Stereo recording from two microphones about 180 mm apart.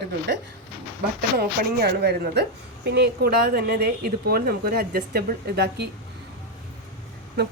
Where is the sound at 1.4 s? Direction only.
65° right (ahead or behind).